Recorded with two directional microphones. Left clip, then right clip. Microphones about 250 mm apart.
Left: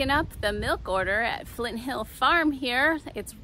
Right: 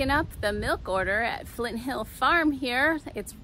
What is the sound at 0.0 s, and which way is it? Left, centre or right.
Speech, centre.